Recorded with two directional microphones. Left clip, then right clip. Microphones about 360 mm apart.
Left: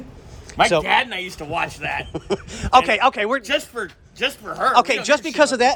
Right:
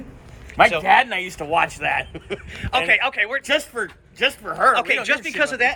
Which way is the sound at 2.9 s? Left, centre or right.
Centre.